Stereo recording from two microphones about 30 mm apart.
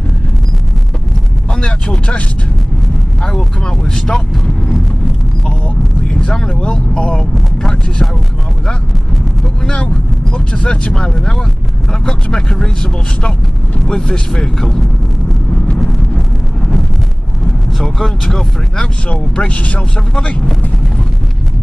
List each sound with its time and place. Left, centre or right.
1.5 s vehicle: left
3.2 s speech: left
6.2 s speech: left
6.6 s speech: left
10.3 s speech: left
10.9 s speech: centre
13.8 s speech: left
14.4 s speech: centre
17.7 s speech: centre
19.0 s speech: left